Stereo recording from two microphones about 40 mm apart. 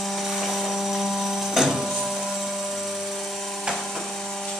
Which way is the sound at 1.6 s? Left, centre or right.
Centre.